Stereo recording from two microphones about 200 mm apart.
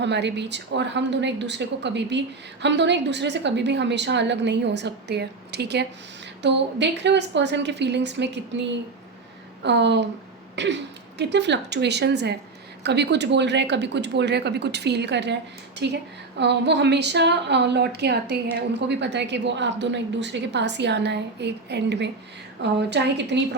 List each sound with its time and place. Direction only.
0.0 s a woman's voice: 60° right (ahead or behind)
9.6 s a woman's voice: 60° right (ahead or behind)
10.5 s throat clearing: 60° right (ahead or behind)
11.2 s a woman's voice: 60° right (ahead or behind)